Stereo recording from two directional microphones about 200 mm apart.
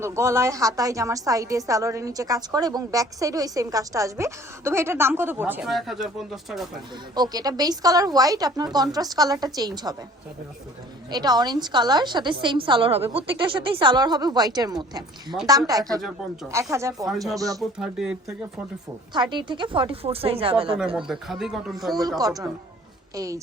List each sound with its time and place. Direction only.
0.0 s a woman's voice: 15° right (ahead or behind)
7.2 s a woman's voice: 20° right (ahead or behind)
11.1 s a woman's voice: 20° right (ahead or behind)
16.0 s speech: centre (ahead or behind)
16.5 s a woman's voice: 15° right (ahead or behind)
17.6 s speech: 5° right (ahead or behind)
19.1 s a woman's voice: 20° right (ahead or behind)
20.7 s speech: 5° right (ahead or behind)
23.1 s a woman's voice: 15° right (ahead or behind)